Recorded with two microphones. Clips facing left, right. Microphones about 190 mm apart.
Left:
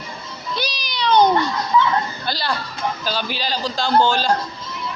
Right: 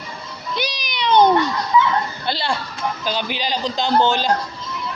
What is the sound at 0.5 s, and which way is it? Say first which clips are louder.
Music: right 1 dB; 20° right (ahead or behind).